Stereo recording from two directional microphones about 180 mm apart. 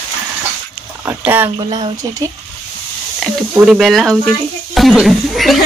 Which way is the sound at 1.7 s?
20° right (ahead or behind).